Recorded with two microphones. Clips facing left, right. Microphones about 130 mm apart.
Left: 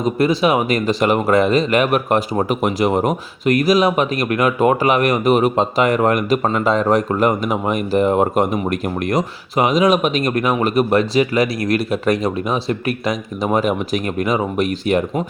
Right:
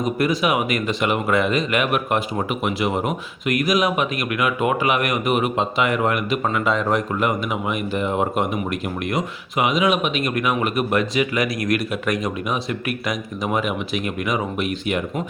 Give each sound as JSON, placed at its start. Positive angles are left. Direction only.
{"t": 0.0, "sound": "speech", "side_deg": 30}